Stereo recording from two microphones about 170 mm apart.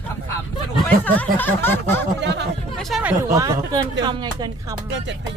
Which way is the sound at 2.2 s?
90° right.